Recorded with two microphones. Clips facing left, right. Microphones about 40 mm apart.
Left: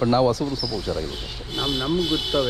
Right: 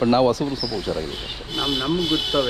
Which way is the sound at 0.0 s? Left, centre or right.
Right.